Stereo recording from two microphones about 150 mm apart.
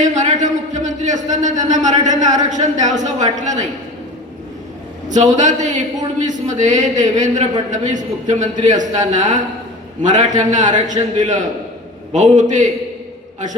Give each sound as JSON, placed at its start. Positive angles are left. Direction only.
{"t": 0.0, "sound": "a man's voice", "side_deg": -55}
{"t": 5.0, "sound": "a man's voice", "side_deg": -55}